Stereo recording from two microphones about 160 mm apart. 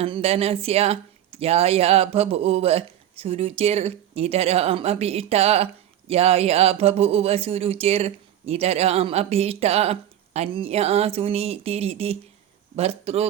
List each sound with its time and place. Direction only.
0.0 s speech: 40° right (ahead or behind)